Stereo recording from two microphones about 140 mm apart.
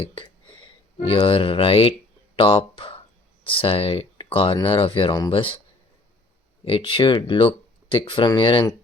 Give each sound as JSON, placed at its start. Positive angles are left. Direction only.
{"t": 0.0, "sound": "speech", "side_deg": 40}
{"t": 6.7, "sound": "speech", "side_deg": 40}